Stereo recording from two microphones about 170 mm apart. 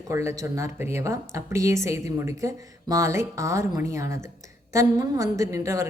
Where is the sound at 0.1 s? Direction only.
15° right (ahead or behind).